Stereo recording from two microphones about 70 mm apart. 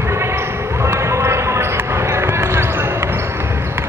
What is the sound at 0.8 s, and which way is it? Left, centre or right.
Basketball bounce, right.